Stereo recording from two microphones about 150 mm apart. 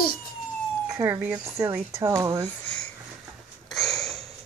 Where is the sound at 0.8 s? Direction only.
20° right (ahead or behind).